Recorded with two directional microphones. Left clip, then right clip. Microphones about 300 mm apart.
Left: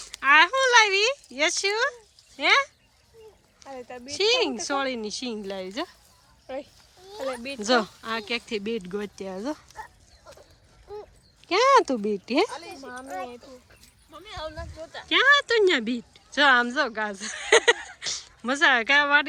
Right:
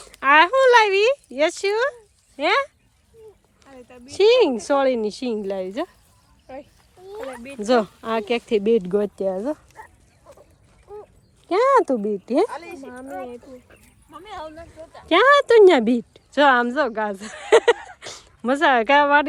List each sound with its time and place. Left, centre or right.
0.0 s a sound: centre
3.8 s speech: left
4.2 s speech: centre
6.5 s a child's voice: left
7.6 s speech: centre
11.4 s speech: centre
13.1 s speech: centre
14.1 s speech: centre
14.5 s speech: left
15.0 s a woman's voice: centre